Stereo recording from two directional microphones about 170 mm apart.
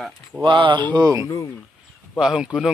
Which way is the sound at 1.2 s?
20° left (ahead or behind).